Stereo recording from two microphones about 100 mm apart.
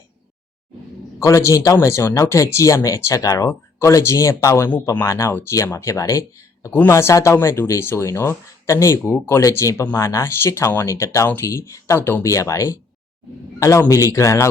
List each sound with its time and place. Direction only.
1.2 s speech: 30° left (ahead or behind)